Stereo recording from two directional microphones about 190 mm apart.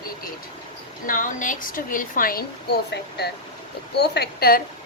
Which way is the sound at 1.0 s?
45° left (ahead or behind).